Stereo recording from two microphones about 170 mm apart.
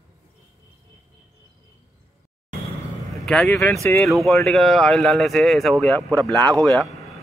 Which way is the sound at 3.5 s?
15° left (ahead or behind).